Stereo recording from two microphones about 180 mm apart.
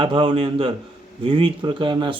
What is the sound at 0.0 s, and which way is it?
Speech, 25° right (ahead or behind).